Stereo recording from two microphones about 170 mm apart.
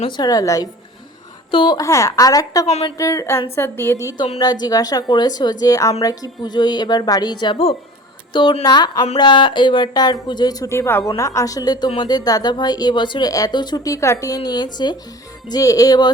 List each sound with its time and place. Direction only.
0.2 s a woman's voice: 20° left (ahead or behind)
2.6 s a woman's voice: 40° left (ahead or behind)
3.0 s a woman's voice: 20° left (ahead or behind)